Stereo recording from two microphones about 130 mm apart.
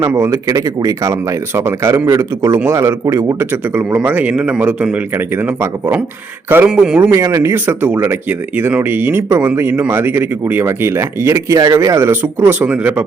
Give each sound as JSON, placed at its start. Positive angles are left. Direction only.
{"t": 0.1, "sound": "speech", "side_deg": -20}
{"t": 7.1, "sound": "speech", "side_deg": -20}